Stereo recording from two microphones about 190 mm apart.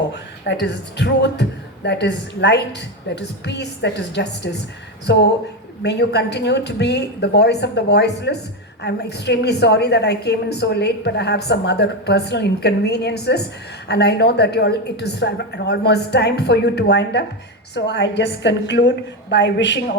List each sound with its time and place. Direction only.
0.4 s a woman's voice: 65° left (ahead or behind)